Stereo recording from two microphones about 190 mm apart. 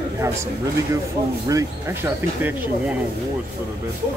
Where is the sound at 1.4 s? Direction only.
15° right (ahead or behind).